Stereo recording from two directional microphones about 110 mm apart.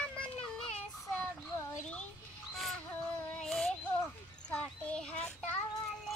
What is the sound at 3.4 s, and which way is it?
Child singing, 5° left (ahead or behind).